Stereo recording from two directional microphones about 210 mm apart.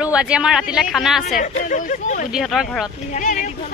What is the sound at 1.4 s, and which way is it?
Speech, 40° left (ahead or behind).